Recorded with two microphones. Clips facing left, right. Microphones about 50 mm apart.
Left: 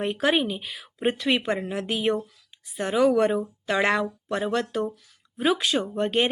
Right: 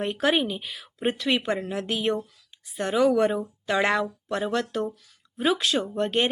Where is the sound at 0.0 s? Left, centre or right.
Centre.